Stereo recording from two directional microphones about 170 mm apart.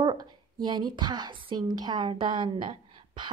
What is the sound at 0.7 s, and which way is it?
A woman's voice, 25° right (ahead or behind).